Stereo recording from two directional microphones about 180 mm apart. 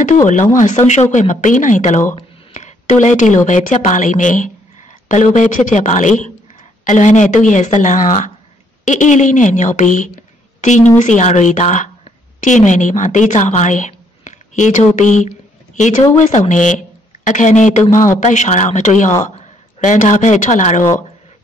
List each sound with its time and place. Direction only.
0.6 s a woman's voice: 40° left (ahead or behind)